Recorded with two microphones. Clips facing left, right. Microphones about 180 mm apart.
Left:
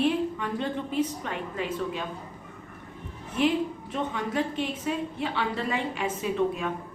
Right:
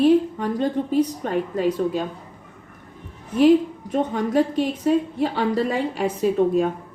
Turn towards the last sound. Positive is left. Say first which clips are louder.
# right 8 dB
turn(degrees=-40)  # may be behind; listen again after turning